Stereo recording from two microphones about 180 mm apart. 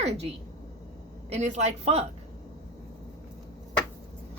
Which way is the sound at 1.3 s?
40° right (ahead or behind).